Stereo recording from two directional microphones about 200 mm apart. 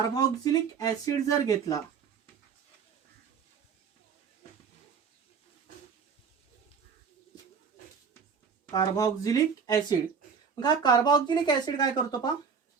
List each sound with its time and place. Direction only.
0.1 s speech: 20° left (ahead or behind)
8.7 s speech: 15° left (ahead or behind)